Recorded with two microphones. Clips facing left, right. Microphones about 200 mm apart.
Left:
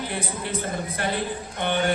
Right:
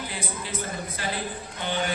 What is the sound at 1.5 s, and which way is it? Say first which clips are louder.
Speech: left 5 dB; 60° left (ahead or behind).